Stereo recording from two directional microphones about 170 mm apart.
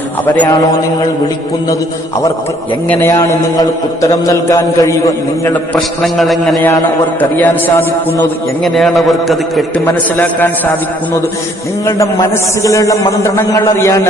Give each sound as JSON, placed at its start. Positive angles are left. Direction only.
{"t": 2.9, "sound": "a man's voice", "side_deg": 15}
{"t": 5.7, "sound": "a man's voice", "side_deg": 0}
{"t": 9.8, "sound": "a man's voice", "side_deg": 10}
{"t": 11.9, "sound": "a man's voice", "side_deg": 20}